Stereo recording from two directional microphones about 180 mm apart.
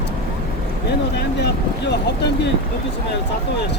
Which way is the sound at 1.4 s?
70° left (ahead or behind).